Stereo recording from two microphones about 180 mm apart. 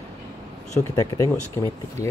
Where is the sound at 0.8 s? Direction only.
15° left (ahead or behind).